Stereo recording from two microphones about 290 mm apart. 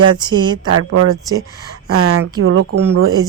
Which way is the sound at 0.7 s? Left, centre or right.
Right.